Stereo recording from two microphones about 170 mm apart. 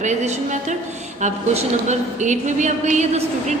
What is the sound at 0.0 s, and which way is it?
Speech, 45° right (ahead or behind).